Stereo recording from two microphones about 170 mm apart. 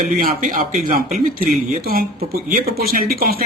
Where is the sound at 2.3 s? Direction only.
60° right (ahead or behind).